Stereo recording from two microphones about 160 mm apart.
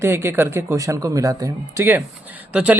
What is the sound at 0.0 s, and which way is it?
Speech, 15° right (ahead or behind).